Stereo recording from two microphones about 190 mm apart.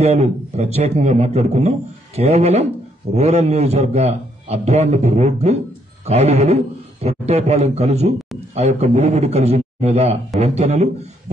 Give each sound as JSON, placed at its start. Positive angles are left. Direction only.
{"t": 0.0, "sound": "a man's voice", "side_deg": -35}